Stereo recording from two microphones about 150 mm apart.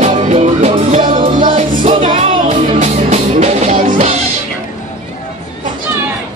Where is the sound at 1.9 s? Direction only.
35° right (ahead or behind).